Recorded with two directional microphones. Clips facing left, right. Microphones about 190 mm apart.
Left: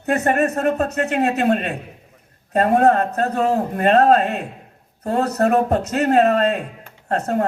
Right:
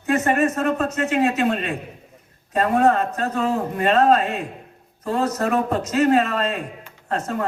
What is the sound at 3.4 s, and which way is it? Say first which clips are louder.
Speech: left 2 dB; 40° left (ahead or behind).